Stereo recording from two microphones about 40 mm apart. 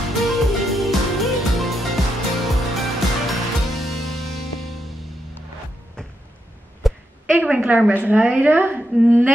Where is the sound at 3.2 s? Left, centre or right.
Centre.